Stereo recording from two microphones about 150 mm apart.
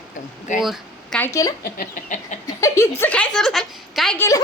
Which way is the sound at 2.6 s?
20° left (ahead or behind).